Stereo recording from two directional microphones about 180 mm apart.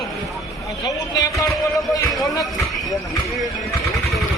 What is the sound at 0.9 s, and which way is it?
Speech, 20° left (ahead or behind).